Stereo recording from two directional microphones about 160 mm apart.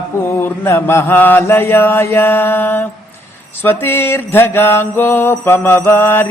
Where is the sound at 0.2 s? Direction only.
15° left (ahead or behind).